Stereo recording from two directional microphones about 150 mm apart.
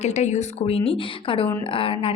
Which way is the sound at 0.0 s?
50° left (ahead or behind).